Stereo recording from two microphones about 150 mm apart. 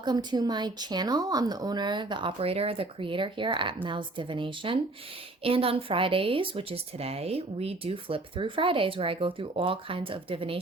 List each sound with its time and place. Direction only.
0.0 s speech: 30° right (ahead or behind)